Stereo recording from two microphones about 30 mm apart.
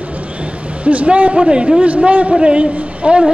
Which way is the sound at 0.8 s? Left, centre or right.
Right.